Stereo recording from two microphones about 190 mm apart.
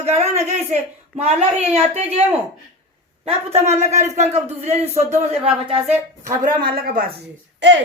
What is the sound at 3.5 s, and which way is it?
Speech, 35° right (ahead or behind).